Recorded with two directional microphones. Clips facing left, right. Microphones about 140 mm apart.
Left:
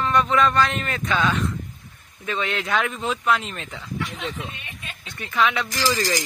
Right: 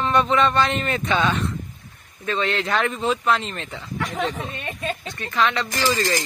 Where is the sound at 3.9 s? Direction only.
50° right (ahead or behind).